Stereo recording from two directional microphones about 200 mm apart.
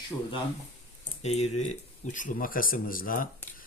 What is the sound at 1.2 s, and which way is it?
Speech, 35° left (ahead or behind).